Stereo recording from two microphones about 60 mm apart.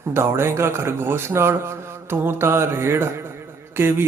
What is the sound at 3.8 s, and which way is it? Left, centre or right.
Speech, right.